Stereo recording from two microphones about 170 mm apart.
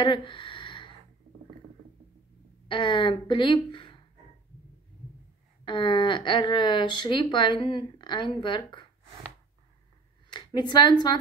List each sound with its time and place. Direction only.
0.0 s a sound: 30° left (ahead or behind)
2.7 s speech: 30° left (ahead or behind)
5.7 s speech: 30° left (ahead or behind)
10.3 s a woman's voice: 25° left (ahead or behind)